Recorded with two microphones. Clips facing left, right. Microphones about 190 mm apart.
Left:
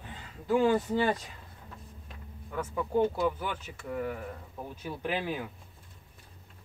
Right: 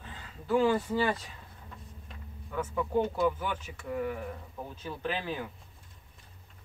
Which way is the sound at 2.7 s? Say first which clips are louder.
Left 2 dB; 10° left (ahead or behind).